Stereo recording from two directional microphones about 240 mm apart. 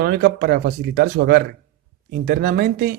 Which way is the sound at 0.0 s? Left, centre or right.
Right.